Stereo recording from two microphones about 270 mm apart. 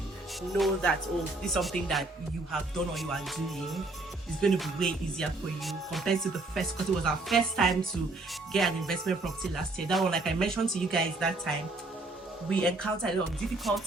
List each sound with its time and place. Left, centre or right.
0.5 s speech: centre